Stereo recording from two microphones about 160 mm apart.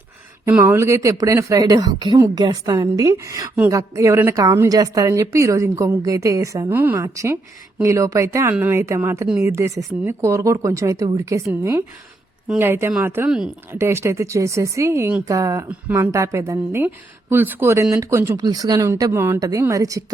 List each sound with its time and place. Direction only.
0.6 s a woman's voice: 15° right (ahead or behind)